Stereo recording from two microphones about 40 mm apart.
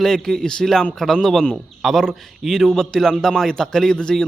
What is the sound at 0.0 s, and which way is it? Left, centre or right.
A man's voice, centre.